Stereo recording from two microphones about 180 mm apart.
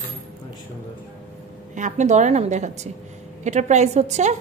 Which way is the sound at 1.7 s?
45° right (ahead or behind).